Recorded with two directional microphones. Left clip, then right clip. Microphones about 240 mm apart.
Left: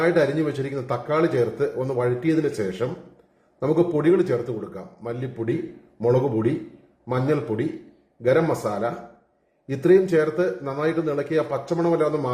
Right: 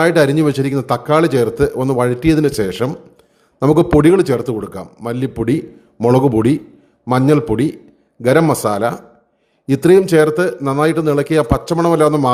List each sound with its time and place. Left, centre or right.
0.0 s a man's voice: right